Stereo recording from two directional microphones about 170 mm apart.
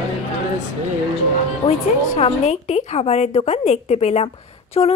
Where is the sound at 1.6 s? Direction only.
30° left (ahead or behind).